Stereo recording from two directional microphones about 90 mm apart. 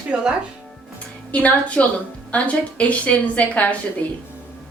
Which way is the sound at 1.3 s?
15° left (ahead or behind).